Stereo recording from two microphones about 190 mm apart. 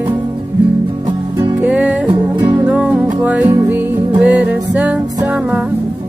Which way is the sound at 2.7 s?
5° right (ahead or behind).